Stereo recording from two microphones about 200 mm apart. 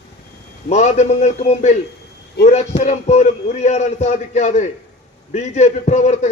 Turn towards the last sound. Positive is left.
turn(degrees=35)  # may be behind; listen again after turning